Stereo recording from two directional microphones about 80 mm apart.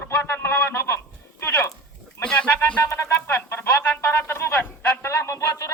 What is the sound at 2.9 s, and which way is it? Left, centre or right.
Music, left.